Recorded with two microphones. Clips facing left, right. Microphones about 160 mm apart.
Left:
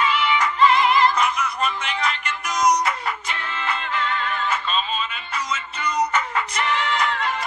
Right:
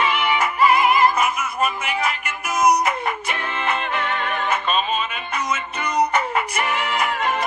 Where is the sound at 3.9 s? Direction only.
60° right (ahead or behind).